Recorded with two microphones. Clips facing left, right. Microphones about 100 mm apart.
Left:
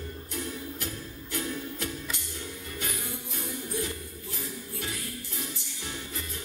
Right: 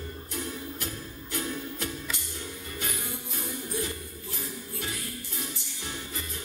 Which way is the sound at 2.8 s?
10° right (ahead or behind).